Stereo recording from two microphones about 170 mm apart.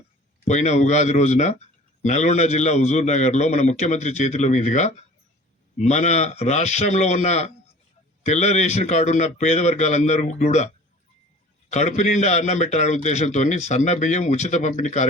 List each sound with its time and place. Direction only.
0.4 s a man's voice: 45° left (ahead or behind)
11.7 s speech: 40° left (ahead or behind)